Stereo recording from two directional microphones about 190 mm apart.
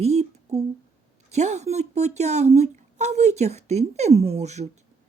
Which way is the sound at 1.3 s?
35° right (ahead or behind).